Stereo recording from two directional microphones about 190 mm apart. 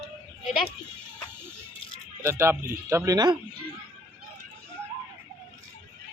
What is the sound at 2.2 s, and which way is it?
Speech, 15° right (ahead or behind).